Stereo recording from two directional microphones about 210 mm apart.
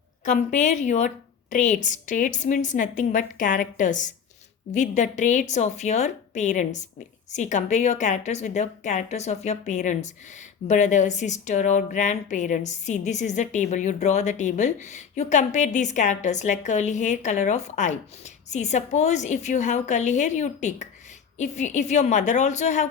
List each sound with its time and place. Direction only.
0.3 s a woman's voice: 35° left (ahead or behind)